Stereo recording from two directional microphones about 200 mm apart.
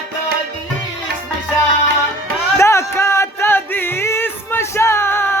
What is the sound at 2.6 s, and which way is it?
Music, 15° left (ahead or behind).